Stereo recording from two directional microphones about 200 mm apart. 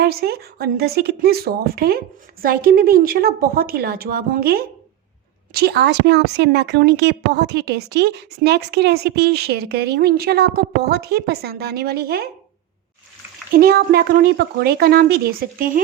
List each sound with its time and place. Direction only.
0.0 s speech: 50° right (ahead or behind)
13.5 s speech: 50° right (ahead or behind)